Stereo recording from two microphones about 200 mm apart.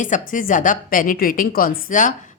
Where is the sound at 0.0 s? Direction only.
40° left (ahead or behind).